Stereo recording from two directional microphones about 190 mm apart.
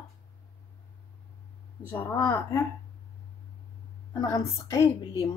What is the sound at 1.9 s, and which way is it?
Speech, 10° left (ahead or behind).